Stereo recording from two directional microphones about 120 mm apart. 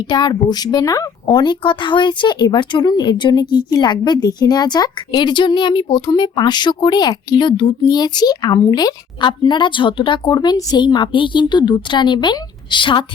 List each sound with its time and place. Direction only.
0.0 s speech: 40° left (ahead or behind)